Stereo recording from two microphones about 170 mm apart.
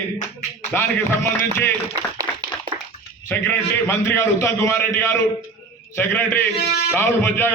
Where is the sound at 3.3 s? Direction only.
10° left (ahead or behind).